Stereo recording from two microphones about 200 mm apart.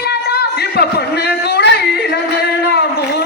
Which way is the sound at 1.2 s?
55° left (ahead or behind).